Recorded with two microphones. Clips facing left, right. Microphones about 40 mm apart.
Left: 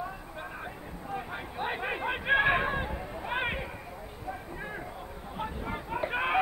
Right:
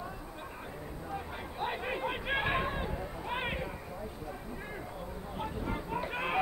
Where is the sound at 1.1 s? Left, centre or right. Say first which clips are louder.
Left 5 dB; left.